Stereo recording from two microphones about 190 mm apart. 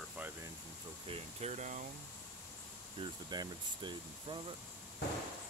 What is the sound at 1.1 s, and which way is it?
Speech, 35° right (ahead or behind).